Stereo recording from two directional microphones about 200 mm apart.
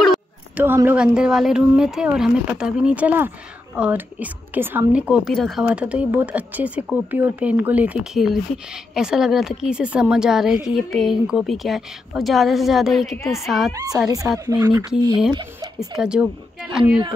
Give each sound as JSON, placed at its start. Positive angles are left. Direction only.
{"t": 0.6, "sound": "a woman's voice", "side_deg": -10}
{"t": 13.7, "sound": "a woman's voice", "side_deg": -15}
{"t": 16.0, "sound": "a woman's voice", "side_deg": -5}